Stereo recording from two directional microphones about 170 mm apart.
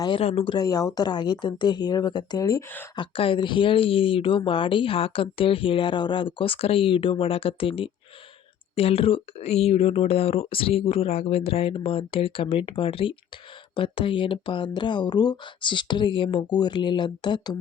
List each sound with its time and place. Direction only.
0.0 s speech: 30° left (ahead or behind)
3.0 s speech: 30° left (ahead or behind)